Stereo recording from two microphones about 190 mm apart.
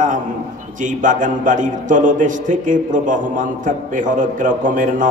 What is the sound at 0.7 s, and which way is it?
A man's voice, 40° right (ahead or behind).